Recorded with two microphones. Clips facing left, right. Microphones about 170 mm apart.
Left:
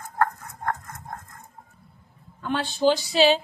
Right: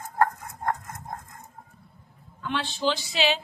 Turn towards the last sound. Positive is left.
turn(degrees=35)  # may be behind; listen again after turning